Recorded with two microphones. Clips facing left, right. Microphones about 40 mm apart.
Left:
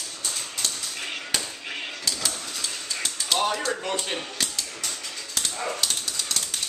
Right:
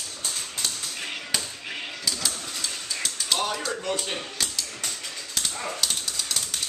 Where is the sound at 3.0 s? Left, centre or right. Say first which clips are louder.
Left 3 dB; centre.